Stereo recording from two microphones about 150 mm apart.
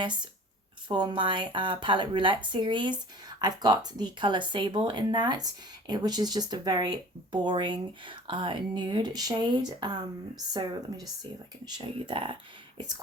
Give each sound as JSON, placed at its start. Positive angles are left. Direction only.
{"t": 0.9, "sound": "speech", "side_deg": -30}